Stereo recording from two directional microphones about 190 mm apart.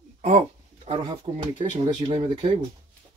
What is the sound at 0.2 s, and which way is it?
Speech, 35° right (ahead or behind).